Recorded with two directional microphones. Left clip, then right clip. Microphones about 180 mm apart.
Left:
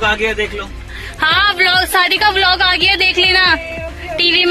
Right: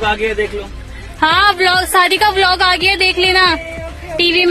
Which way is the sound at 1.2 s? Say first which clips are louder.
Right 1 dB; 25° right (ahead or behind).